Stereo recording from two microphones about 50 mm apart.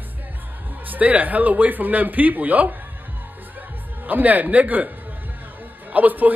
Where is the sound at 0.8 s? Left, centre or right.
Right.